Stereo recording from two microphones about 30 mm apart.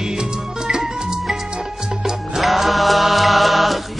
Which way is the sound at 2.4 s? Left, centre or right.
Centre.